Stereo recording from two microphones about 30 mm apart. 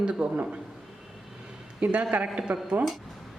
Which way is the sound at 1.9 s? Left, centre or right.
Right.